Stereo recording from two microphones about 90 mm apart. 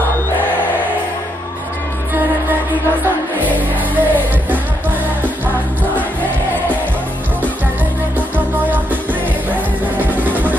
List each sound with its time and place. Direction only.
3.9 s music: 20° right (ahead or behind)
8.4 s music: 20° right (ahead or behind)
10.0 s music: 20° right (ahead or behind)